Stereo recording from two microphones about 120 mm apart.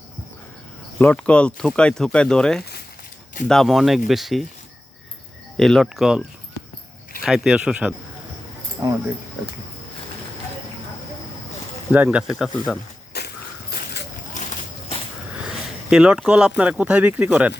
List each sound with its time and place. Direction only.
0.9 s speech: 10° left (ahead or behind)
5.5 s speech: centre (ahead or behind)
11.9 s speech: 10° right (ahead or behind)
14.4 s a sound: 90° left
15.4 s speech: 5° right (ahead or behind)